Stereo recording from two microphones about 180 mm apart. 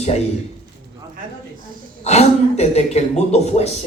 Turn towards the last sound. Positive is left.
turn(degrees=35)  # may be behind; listen again after turning